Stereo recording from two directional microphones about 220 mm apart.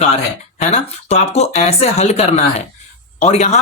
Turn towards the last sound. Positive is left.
turn(degrees=30)  # may be behind; listen again after turning